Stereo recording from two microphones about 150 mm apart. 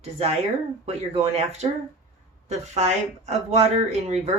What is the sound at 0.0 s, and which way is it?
Speech, 45° right (ahead or behind).